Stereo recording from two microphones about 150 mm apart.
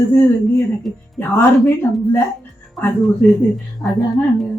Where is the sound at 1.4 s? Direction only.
15° left (ahead or behind).